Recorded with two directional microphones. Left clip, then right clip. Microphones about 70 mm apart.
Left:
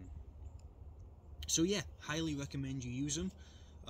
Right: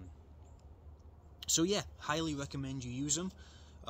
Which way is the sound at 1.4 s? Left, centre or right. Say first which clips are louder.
Right 2 dB; left.